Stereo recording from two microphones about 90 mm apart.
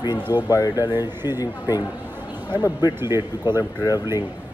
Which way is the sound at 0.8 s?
25° right (ahead or behind).